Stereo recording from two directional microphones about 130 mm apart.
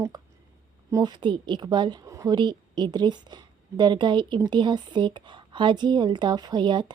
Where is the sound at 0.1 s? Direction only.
30° right (ahead or behind).